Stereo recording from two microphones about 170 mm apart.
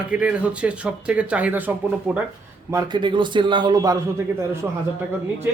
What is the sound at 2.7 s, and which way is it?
A man's voice, 20° right (ahead or behind).